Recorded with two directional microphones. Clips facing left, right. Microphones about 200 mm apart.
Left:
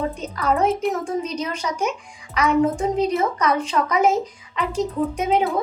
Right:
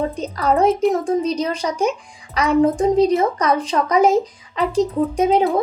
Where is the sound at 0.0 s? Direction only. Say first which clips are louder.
Right 3 dB; 35° right (ahead or behind).